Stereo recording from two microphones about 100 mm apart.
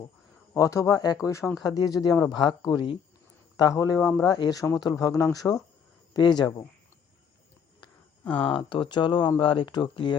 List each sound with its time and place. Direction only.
0.5 s speech: 30° left (ahead or behind)
1.3 s speech: 30° left (ahead or behind)
1.6 s speech: 40° left (ahead or behind)
3.6 s speech: 35° left (ahead or behind)
8.2 s speech: 15° left (ahead or behind)
8.5 s speech: 55° left (ahead or behind)